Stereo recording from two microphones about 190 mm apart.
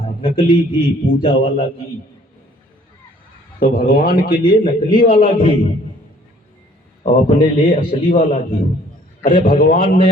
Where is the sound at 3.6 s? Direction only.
50° left (ahead or behind).